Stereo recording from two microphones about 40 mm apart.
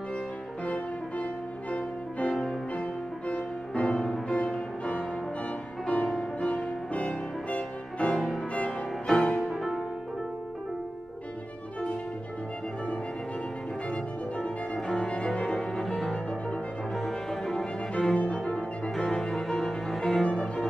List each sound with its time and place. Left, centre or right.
0.7 s music: left
6.4 s music: left
9.4 s music: centre
13.8 s music: left
14.8 s music: centre
15.3 s cello: left
16.3 s music: left
17.1 s cello: centre
18.1 s cello: left
18.9 s cello: centre